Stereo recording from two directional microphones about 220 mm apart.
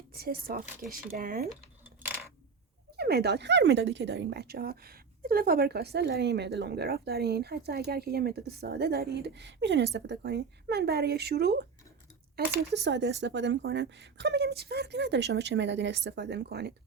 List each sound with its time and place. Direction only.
0.1 s speech: 45° right (ahead or behind)
2.9 s speech: 45° right (ahead or behind)
12.7 s speech: 50° right (ahead or behind)